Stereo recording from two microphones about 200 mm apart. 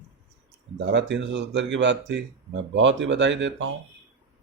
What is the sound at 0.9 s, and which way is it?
Speech, 65° right (ahead or behind).